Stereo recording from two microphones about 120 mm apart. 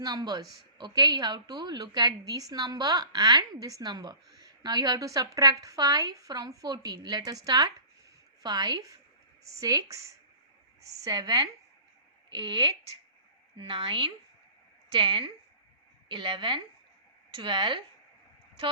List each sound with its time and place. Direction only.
0.0 s a woman's voice: 35° right (ahead or behind)